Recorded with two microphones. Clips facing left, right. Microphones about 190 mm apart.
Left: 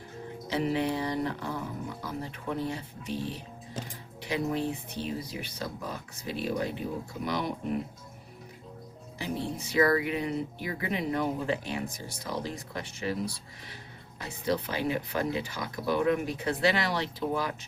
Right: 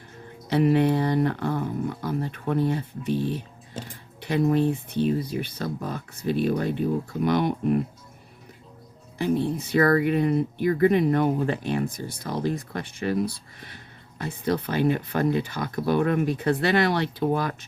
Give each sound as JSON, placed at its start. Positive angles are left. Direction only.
{"t": 0.4, "sound": "speech", "side_deg": -60}
{"t": 9.1, "sound": "speech", "side_deg": -55}